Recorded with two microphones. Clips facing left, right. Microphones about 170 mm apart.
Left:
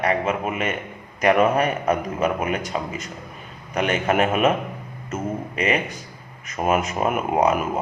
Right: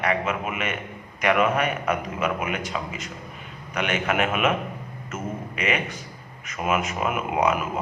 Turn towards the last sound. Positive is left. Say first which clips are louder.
# left 3 dB
turn(degrees=40)  # may be behind; listen again after turning